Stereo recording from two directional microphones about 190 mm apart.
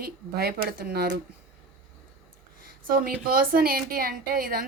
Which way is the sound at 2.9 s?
50° right (ahead or behind).